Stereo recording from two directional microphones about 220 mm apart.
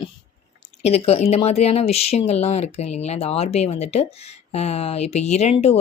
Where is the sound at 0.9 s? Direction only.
25° left (ahead or behind).